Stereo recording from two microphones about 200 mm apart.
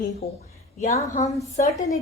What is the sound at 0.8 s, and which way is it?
A woman's voice, 35° left (ahead or behind).